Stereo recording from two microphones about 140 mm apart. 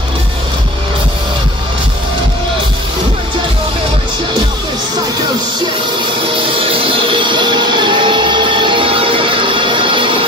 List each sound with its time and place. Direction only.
6.3 s music: 40° right (ahead or behind)